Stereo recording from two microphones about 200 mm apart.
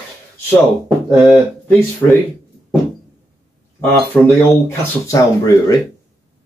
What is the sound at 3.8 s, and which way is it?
Speech, 10° left (ahead or behind).